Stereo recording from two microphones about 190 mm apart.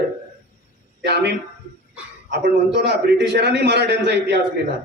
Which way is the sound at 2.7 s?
65° right (ahead or behind).